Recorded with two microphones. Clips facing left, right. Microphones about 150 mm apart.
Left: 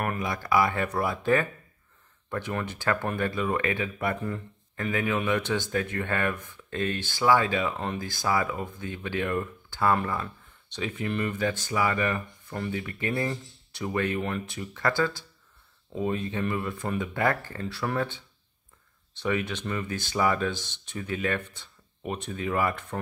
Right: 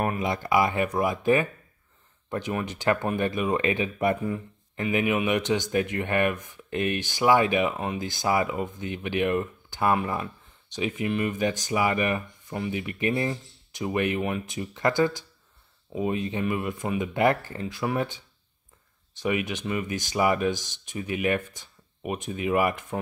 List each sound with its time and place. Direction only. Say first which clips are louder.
0.0 s speech: right 3 dB; 20° right (ahead or behind)